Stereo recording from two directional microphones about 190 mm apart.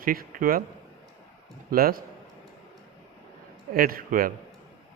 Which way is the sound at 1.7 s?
50° right (ahead or behind).